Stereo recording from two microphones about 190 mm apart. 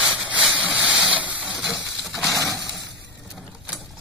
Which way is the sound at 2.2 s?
15° left (ahead or behind).